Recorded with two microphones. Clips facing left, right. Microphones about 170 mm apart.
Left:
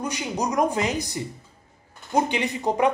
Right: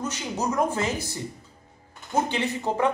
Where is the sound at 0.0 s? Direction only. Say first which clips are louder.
Left 2 dB; 15° left (ahead or behind).